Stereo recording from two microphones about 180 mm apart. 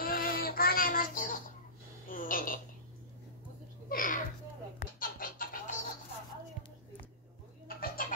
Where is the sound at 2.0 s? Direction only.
50° left (ahead or behind).